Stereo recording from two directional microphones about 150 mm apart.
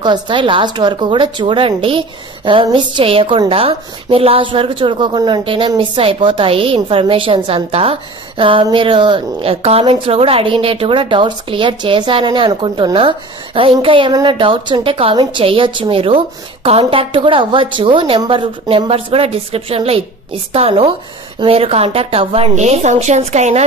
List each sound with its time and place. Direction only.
0.0 s a woman's voice: 30° right (ahead or behind); by 23.6 s 50° right (ahead or behind)